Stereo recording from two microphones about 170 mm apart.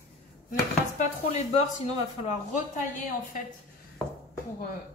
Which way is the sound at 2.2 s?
45° left (ahead or behind).